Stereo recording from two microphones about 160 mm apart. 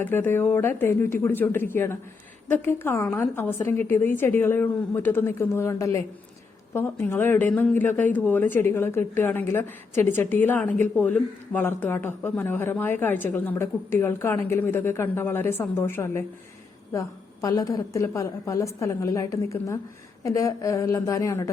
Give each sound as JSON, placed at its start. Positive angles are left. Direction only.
{"t": 0.0, "sound": "speech", "side_deg": 15}
{"t": 17.4, "sound": "a woman's voice", "side_deg": 20}